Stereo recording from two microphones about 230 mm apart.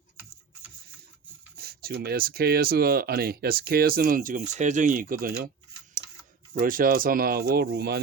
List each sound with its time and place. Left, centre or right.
1.5 s speech: right
6.5 s speech: right